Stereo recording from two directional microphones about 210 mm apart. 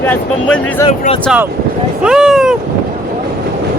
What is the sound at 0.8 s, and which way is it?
Speech, 25° left (ahead or behind).